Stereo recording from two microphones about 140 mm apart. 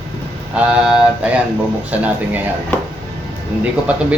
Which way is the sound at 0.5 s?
10° right (ahead or behind).